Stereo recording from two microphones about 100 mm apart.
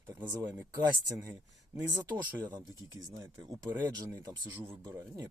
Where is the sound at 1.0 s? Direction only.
40° right (ahead or behind).